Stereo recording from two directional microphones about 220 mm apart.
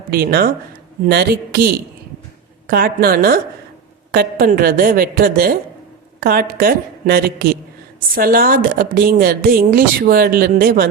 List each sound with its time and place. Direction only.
0.1 s a woman's voice: 45° right (ahead or behind)